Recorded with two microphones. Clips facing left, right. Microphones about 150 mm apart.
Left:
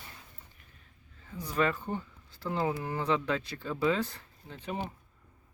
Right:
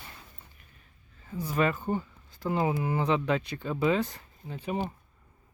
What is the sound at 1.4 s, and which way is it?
Speech, 10° right (ahead or behind).